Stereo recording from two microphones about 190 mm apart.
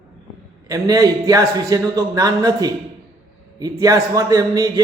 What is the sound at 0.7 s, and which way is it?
A man's voice, 20° right (ahead or behind).